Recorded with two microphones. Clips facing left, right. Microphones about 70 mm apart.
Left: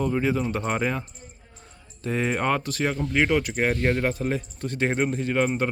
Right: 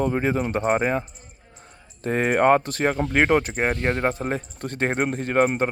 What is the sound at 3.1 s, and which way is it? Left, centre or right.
Speech, right.